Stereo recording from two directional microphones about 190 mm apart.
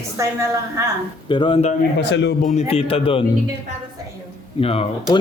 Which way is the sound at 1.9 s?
70° left (ahead or behind).